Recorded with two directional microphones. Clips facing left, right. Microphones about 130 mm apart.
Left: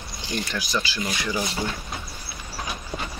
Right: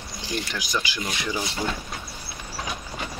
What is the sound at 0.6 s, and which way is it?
Speech, 15° right (ahead or behind).